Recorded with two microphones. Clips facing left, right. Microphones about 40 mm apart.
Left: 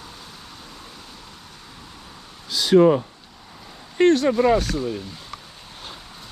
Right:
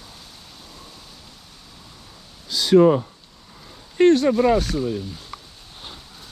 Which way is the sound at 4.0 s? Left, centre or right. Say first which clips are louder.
Right 1 dB; left.